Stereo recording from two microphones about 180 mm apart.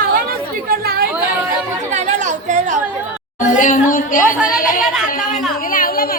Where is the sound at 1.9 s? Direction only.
40° right (ahead or behind).